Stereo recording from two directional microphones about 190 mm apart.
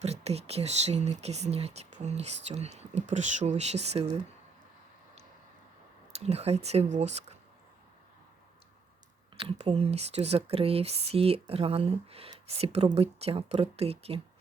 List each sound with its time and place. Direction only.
0.0 s speech: 35° right (ahead or behind)
6.1 s speech: 35° right (ahead or behind)
9.4 s speech: 30° right (ahead or behind)